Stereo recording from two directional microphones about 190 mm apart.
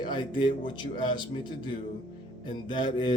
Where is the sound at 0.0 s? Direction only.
25° left (ahead or behind).